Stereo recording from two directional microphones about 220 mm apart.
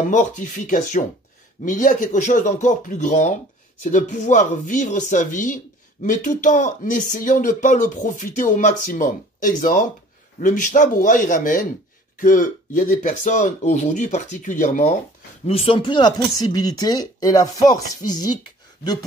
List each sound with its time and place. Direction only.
0.1 s speech: 35° left (ahead or behind); by 18.3 s 15° left (ahead or behind)